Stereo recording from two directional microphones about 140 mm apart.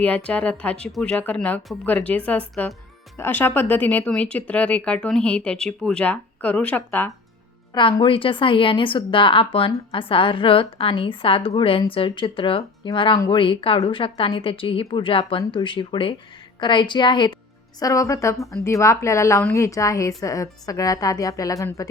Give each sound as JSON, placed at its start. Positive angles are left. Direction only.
{"t": 0.0, "sound": "speech", "side_deg": 10}
{"t": 7.7, "sound": "a woman's voice", "side_deg": 30}